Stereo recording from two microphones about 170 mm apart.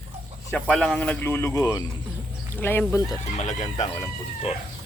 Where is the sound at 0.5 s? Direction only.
5° left (ahead or behind).